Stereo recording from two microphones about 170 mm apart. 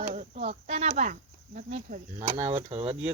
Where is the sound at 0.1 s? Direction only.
40° right (ahead or behind).